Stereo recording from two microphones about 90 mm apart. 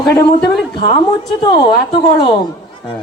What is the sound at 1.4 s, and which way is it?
Speech, 45° left (ahead or behind).